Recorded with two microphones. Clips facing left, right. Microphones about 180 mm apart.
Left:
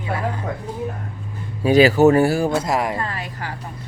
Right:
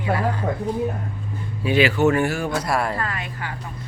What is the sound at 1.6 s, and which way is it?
Speech, 40° left (ahead or behind).